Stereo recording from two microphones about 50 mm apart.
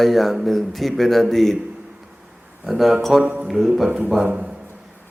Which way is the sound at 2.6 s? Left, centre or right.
Centre.